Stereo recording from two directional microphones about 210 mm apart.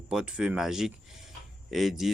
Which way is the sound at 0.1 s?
5° right (ahead or behind).